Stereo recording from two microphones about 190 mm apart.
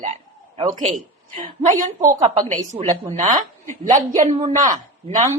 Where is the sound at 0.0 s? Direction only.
35° right (ahead or behind).